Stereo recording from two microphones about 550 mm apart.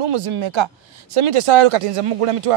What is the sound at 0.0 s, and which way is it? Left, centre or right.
A man's voice, right.